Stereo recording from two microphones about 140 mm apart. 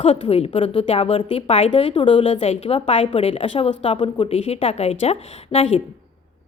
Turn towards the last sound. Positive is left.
turn(degrees=45)  # may be behind; listen again after turning